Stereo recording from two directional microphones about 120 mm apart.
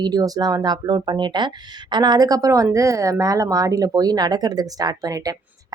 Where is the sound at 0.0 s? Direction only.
35° right (ahead or behind).